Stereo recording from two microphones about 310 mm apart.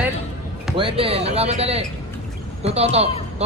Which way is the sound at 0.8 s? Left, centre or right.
Centre.